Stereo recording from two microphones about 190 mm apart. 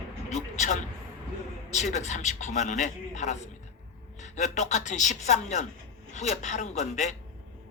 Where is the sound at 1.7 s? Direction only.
35° left (ahead or behind).